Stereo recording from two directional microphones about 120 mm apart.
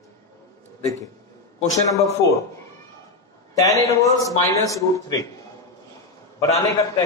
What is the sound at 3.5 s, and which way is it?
A man's voice, 30° left (ahead or behind).